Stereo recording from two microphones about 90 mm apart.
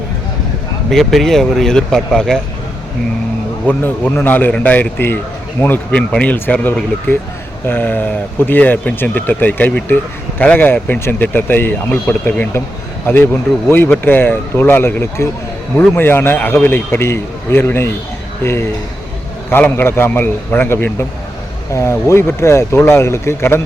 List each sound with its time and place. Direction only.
0.9 s speech: 5° left (ahead or behind)
3.7 s speech: 20° left (ahead or behind)
19.5 s speech: 20° left (ahead or behind)